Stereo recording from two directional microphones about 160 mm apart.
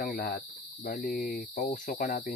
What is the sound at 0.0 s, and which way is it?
Cricket, 85° left.